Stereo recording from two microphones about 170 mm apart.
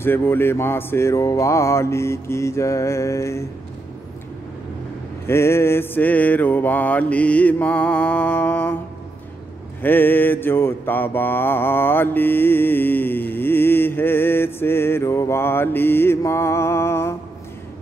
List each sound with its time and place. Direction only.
0.0 s mantra: 15° left (ahead or behind)
5.2 s mantra: 15° left (ahead or behind)
9.8 s mantra: 10° left (ahead or behind)